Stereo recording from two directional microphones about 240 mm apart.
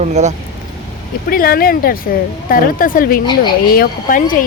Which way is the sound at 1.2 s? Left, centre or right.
Left.